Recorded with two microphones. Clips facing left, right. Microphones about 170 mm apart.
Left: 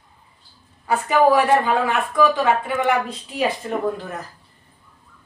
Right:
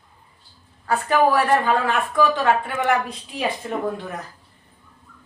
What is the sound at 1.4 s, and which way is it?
Speech, 10° left (ahead or behind).